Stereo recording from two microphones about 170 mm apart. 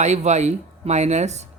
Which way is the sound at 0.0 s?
40° right (ahead or behind).